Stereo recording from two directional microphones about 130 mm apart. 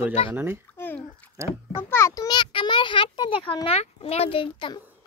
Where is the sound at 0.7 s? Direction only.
15° left (ahead or behind).